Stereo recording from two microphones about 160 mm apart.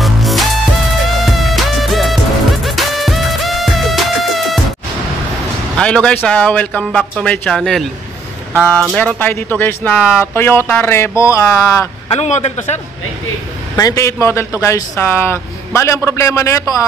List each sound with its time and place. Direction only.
0.0 s music: centre (ahead or behind)
5.8 s a man's voice: 5° left (ahead or behind)
8.9 s a man's voice: 10° left (ahead or behind)
9.9 s a man's voice: 5° right (ahead or behind)
10.3 s a man's voice: 15° left (ahead or behind)
12.1 s a man's voice: 45° left (ahead or behind)
13.7 s a man's voice: 20° left (ahead or behind)